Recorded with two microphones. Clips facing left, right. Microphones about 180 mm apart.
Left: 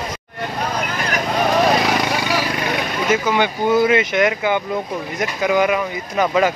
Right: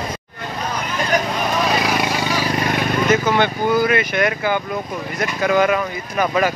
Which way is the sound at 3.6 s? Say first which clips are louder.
Left 6 dB; 25° left (ahead or behind).